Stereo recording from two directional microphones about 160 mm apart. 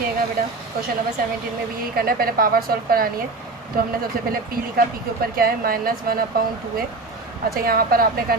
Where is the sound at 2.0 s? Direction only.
65° right (ahead or behind).